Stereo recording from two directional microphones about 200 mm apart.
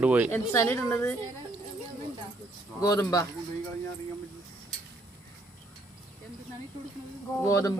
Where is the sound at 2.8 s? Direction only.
15° left (ahead or behind).